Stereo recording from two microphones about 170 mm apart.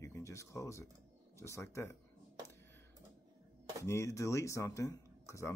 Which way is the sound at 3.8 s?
15° left (ahead or behind).